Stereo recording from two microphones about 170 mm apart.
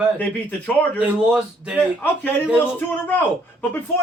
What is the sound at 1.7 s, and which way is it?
Speech, 10° left (ahead or behind).